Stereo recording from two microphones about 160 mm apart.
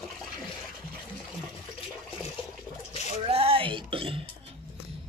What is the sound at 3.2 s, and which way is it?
Throat clearing, 35° right (ahead or behind).